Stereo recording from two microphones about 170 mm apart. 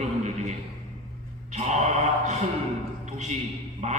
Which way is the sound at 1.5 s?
40° right (ahead or behind).